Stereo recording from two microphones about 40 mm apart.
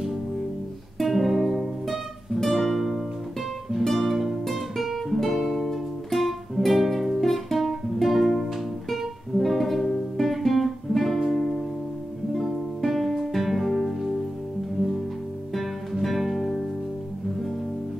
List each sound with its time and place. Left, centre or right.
0.9 s music: centre
7.2 s guitar: centre
7.6 s music: centre
12.8 s music: centre
15.5 s music: centre